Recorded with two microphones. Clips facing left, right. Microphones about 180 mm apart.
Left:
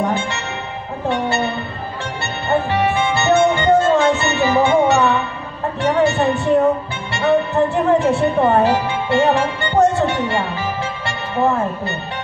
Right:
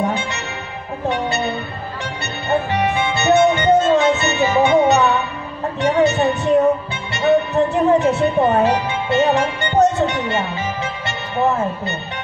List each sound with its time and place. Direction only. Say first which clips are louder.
1.0 s music: left 1 dB; 20° right (ahead or behind)
2.5 s music: left 1 dB; 20° right (ahead or behind)